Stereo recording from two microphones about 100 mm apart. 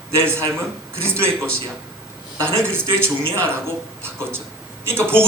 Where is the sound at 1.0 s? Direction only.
25° right (ahead or behind).